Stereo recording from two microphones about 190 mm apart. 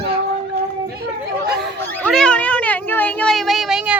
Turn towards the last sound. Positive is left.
turn(degrees=-5)  # may be behind; listen again after turning